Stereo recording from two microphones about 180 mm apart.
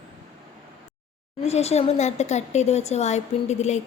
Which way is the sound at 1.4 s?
35° left (ahead or behind).